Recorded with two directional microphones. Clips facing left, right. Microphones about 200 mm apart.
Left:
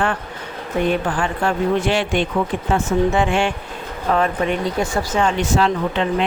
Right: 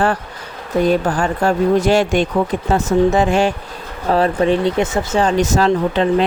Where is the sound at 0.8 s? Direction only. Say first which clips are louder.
Right 4 dB; 40° right (ahead or behind).